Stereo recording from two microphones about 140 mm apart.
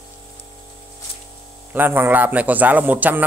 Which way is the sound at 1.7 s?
15° right (ahead or behind).